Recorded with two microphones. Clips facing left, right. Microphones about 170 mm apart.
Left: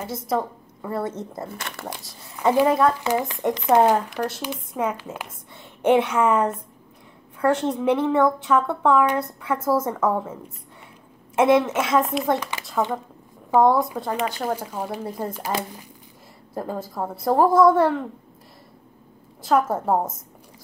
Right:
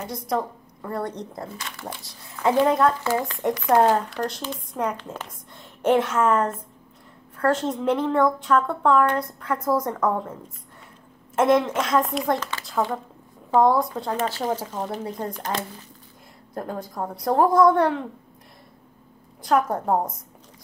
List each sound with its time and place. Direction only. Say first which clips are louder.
0.0 s a woman's voice: left 1 dB; 5° left (ahead or behind)
2.5 s a woman's voice: left 1 dB; 5° left (ahead or behind)
3.0 s a woman's voice: left 1 dB; 20° left (ahead or behind); by 12.4 s centre (ahead or behind)
12.4 s a woman's voice: left 1 dB; 15° left (ahead or behind)
12.6 s a woman's voice: even; centre (ahead or behind)
14.1 s a woman's voice: right 1 dB; 15° left (ahead or behind)
19.4 s a woman's voice: left 1 dB; 5° left (ahead or behind)